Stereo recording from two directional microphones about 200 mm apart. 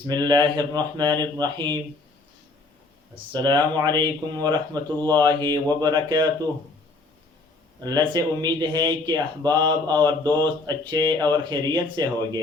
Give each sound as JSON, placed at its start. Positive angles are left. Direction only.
{"t": 0.1, "sound": "speech", "side_deg": -20}
{"t": 3.3, "sound": "speech", "side_deg": -20}
{"t": 7.9, "sound": "speech", "side_deg": -20}